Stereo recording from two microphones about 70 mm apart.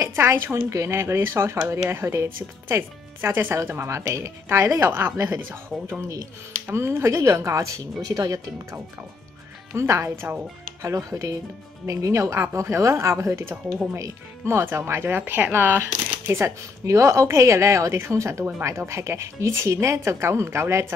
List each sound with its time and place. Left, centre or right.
0.3 s speech: right
9.8 s speech: right
16.3 s speech: right